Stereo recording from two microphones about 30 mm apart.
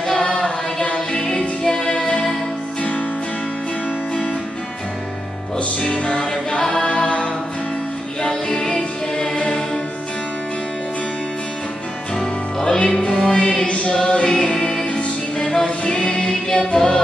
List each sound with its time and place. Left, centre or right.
0.9 s music: left
5.9 s music: left
6.9 s a capella: left
8.2 s music: left
12.2 s music: left